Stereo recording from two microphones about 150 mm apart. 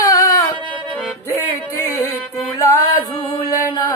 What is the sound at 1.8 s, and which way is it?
Music, 20° left (ahead or behind).